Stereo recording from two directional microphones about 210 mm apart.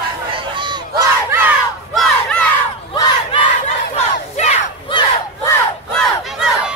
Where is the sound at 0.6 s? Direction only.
20° right (ahead or behind).